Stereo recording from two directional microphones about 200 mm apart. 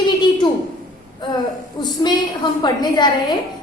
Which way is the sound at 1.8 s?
20° left (ahead or behind).